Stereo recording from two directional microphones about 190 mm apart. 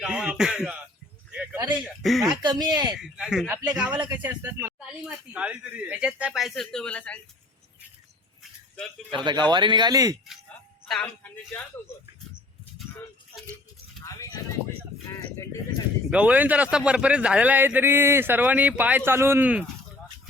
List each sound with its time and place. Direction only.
0.0 s speech: 5° right (ahead or behind)
1.5 s a sound: 25° right (ahead or behind)
1.8 s a man's voice: centre (ahead or behind)
2.4 s speech: 20° right (ahead or behind)
3.0 s a man's voice: 5° right (ahead or behind)
9.1 s speech: 25° right (ahead or behind)
10.8 s speech: 5° left (ahead or behind)
14.0 s a sound: 20° left (ahead or behind)
16.0 s a man's voice: 5° right (ahead or behind)